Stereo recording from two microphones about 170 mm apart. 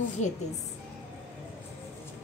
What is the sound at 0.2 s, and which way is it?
Speech, 45° left (ahead or behind).